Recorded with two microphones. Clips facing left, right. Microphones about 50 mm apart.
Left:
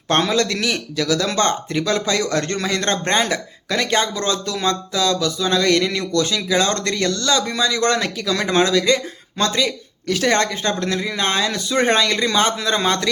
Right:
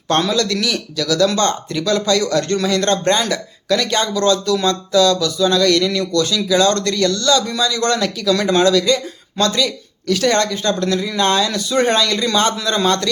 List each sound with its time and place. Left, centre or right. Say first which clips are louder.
0.1 s speech: right 1 dB; left